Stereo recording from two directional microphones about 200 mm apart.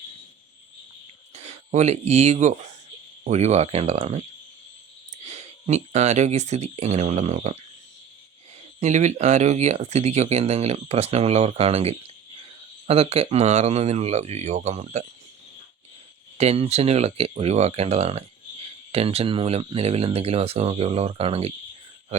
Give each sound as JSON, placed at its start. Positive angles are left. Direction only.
{"t": 1.3, "sound": "speech", "side_deg": -35}
{"t": 5.2, "sound": "speech", "side_deg": -35}
{"t": 8.8, "sound": "speech", "side_deg": -35}
{"t": 16.4, "sound": "speech", "side_deg": -30}